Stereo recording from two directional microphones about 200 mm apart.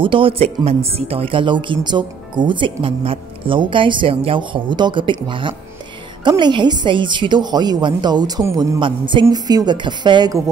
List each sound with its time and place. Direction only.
0.0 s speech: 25° right (ahead or behind)